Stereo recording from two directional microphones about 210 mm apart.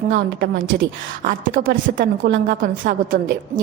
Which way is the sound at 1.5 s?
60° right (ahead or behind).